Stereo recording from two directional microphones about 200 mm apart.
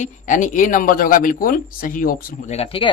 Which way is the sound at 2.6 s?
25° left (ahead or behind).